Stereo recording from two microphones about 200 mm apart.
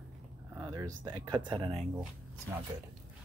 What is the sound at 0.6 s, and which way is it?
Speech, 20° right (ahead or behind).